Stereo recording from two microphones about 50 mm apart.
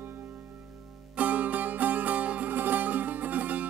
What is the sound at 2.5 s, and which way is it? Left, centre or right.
Music, right.